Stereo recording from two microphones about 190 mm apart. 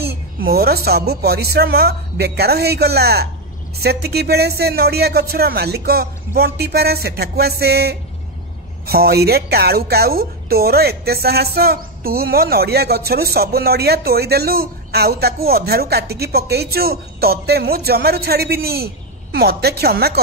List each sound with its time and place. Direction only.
0.1 s a woman's voice: 55° right (ahead or behind)